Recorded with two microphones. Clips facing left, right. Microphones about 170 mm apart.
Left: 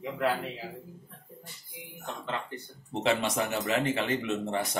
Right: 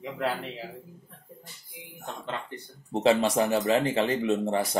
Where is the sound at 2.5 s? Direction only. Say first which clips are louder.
Right 4 dB; 35° right (ahead or behind).